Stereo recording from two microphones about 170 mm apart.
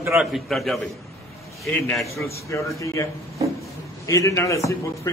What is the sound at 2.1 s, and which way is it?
A man's voice, 15° left (ahead or behind).